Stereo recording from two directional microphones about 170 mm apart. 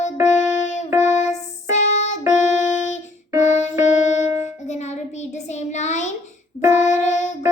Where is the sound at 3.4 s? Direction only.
45° left (ahead or behind).